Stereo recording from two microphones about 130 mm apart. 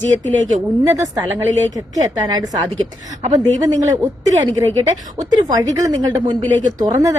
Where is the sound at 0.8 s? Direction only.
25° right (ahead or behind).